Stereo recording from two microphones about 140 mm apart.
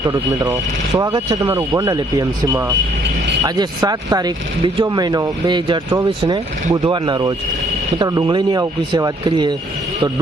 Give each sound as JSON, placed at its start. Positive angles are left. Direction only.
{"t": 0.0, "sound": "speech", "side_deg": -25}